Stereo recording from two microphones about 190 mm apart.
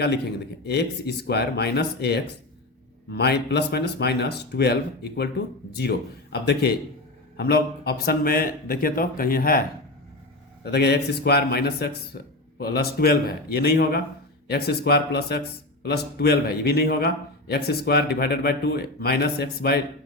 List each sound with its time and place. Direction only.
0.7 s a man's voice: 60° left (ahead or behind)
10.6 s speech: 60° left (ahead or behind)